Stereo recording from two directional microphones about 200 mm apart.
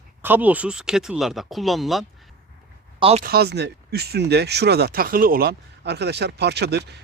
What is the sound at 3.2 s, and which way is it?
Speech, 50° right (ahead or behind).